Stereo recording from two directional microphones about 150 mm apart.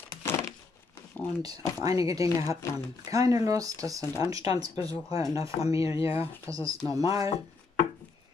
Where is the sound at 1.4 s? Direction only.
25° right (ahead or behind).